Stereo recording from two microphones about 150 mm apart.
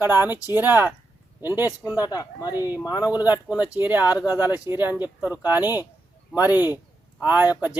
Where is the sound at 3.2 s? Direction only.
10° right (ahead or behind).